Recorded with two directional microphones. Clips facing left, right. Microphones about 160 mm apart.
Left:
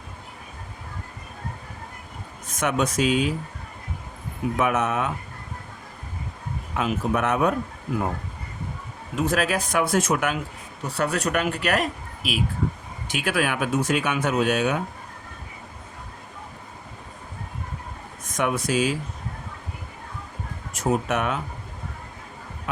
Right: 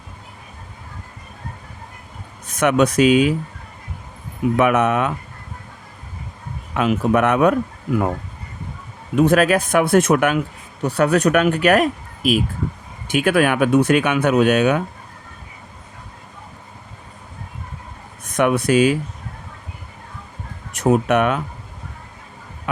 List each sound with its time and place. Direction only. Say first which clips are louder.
2.5 s speech: right 8 dB; 70° right (ahead or behind)
4.5 s speech: right 7 dB; 65° right (ahead or behind)
6.7 s speech: right 7 dB; 75° right (ahead or behind)
9.1 s speech: right 9 dB; 60° right (ahead or behind)
18.3 s speech: right 8 dB; 65° right (ahead or behind)
20.7 s speech: right 8 dB; 65° right (ahead or behind)